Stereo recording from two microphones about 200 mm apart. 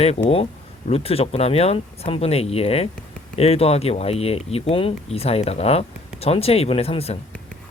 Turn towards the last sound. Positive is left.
turn(degrees=30)  # may be behind; listen again after turning